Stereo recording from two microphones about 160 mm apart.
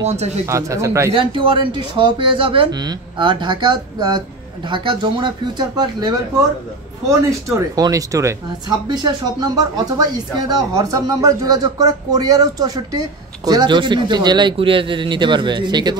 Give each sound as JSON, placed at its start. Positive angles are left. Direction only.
{"t": 0.5, "sound": "speech", "side_deg": -20}
{"t": 1.1, "sound": "speech", "side_deg": -30}